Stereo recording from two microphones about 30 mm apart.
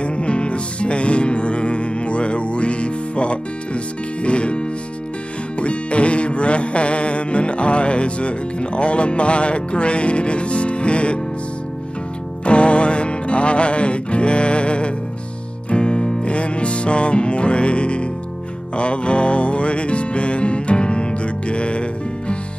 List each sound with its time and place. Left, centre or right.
0.0 s music: left
12.4 s music: left